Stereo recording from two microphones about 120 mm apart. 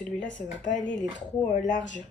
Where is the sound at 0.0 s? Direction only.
5° left (ahead or behind).